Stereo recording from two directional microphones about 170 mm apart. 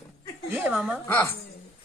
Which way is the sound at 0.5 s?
10° right (ahead or behind).